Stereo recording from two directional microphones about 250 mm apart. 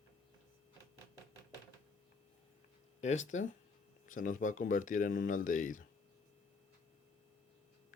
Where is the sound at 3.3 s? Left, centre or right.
Left.